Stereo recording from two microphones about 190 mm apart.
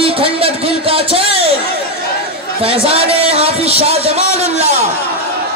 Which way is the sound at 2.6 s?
30° right (ahead or behind).